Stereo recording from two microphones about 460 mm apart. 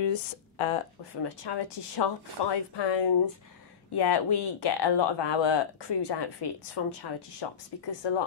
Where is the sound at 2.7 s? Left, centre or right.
Left.